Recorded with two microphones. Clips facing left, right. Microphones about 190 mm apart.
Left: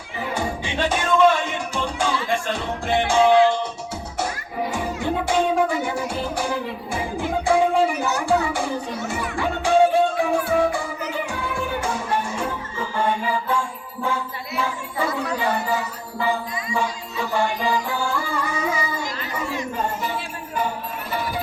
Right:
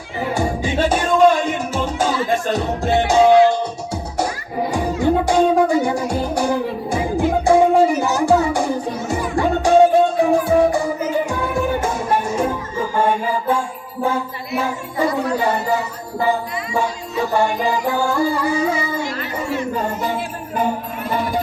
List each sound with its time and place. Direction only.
0.3 s music: 40° right (ahead or behind)
4.7 s music: 40° right (ahead or behind)
16.7 s music: 45° right (ahead or behind)
20.0 s music: 50° right (ahead or behind)